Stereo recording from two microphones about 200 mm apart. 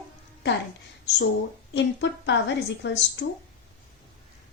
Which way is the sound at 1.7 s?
60° left (ahead or behind).